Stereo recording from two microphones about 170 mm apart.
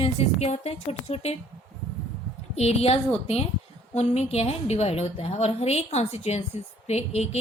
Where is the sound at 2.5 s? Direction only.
40° left (ahead or behind).